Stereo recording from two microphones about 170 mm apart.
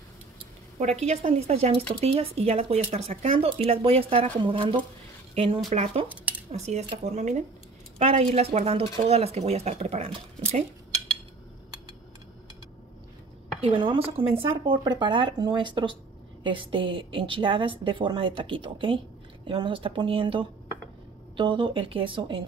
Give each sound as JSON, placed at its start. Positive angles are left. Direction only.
{"t": 0.7, "sound": "speech", "side_deg": -40}
{"t": 6.0, "sound": "speech", "side_deg": -10}
{"t": 6.5, "sound": "speech", "side_deg": -40}
{"t": 13.6, "sound": "a woman's voice", "side_deg": -30}